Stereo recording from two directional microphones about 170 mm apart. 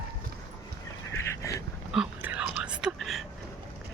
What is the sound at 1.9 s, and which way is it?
Whispering, 5° right (ahead or behind).